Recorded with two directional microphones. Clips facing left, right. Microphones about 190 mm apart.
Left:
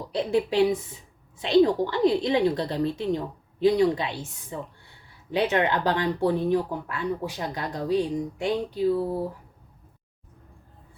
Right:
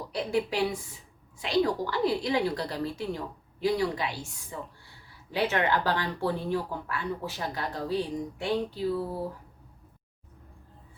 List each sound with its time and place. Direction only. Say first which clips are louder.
0.1 s a woman's voice: left 5 dB; 25° left (ahead or behind)